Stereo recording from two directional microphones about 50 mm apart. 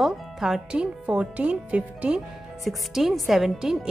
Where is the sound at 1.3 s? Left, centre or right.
Right.